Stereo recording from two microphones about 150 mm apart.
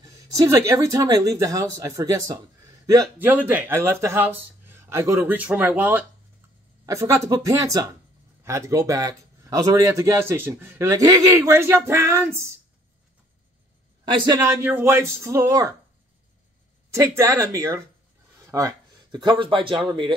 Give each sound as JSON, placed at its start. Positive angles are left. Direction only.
{"t": 0.0, "sound": "a man's voice", "side_deg": -25}
{"t": 14.3, "sound": "a man's voice", "side_deg": -15}
{"t": 16.9, "sound": "a man's voice", "side_deg": -20}